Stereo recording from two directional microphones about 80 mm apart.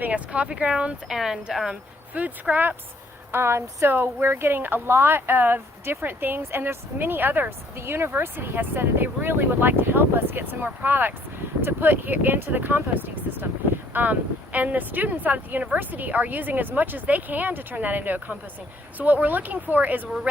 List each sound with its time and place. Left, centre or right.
0.0 s speech: centre
2.1 s a woman's voice: right
3.3 s a woman's voice: right